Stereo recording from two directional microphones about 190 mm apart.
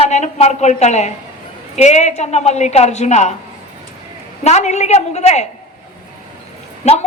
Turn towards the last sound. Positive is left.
turn(degrees=35)  # may be behind; listen again after turning